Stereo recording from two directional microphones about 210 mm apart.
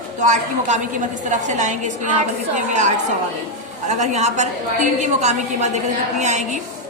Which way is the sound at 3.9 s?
35° right (ahead or behind).